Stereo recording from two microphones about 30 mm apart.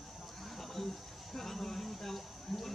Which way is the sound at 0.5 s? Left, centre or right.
Centre.